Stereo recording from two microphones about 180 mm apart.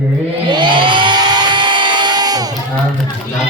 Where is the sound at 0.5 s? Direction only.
25° right (ahead or behind).